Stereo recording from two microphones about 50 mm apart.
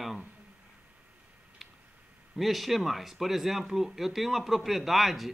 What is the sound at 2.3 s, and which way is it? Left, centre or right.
Speech, centre.